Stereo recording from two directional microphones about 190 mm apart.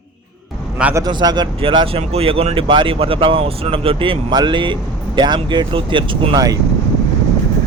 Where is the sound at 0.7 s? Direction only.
5° right (ahead or behind).